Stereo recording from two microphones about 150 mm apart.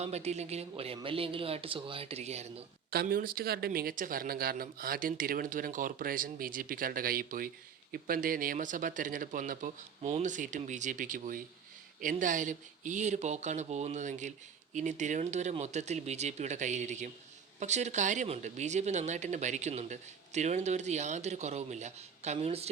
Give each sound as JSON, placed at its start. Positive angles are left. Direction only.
{"t": 0.0, "sound": "speech", "side_deg": -45}
{"t": 2.9, "sound": "speech", "side_deg": -85}